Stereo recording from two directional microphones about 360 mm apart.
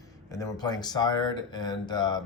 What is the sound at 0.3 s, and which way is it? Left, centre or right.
Speech, centre.